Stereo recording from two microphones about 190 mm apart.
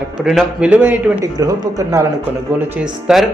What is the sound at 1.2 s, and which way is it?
Speech, 20° right (ahead or behind).